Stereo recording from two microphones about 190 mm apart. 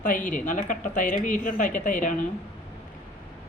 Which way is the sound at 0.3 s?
45° left (ahead or behind).